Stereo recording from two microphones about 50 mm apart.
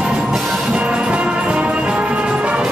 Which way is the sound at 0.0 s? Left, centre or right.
Centre.